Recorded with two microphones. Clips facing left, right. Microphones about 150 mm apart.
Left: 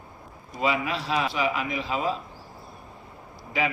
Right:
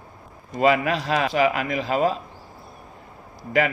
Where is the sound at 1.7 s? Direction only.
45° right (ahead or behind).